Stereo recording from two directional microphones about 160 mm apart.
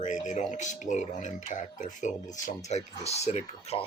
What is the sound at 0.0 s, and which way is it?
Speech, 50° left (ahead or behind).